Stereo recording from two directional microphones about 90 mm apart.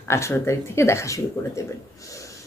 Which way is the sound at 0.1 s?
30° left (ahead or behind).